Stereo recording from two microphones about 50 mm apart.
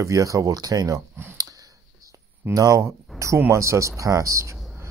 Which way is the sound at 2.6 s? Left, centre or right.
Right.